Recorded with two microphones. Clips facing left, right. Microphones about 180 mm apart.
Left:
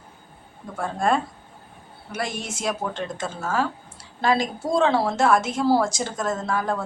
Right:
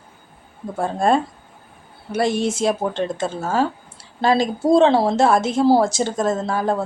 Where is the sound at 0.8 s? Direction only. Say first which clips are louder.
Right 5 dB; 30° right (ahead or behind).